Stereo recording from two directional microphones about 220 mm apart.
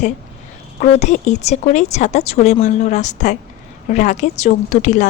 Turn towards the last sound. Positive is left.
turn(degrees=35)  # may be behind; listen again after turning